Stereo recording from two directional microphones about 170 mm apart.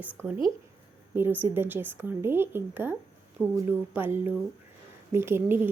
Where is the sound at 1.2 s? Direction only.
10° right (ahead or behind).